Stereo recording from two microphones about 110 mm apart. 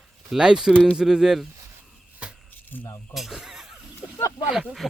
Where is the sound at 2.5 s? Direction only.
15° left (ahead or behind).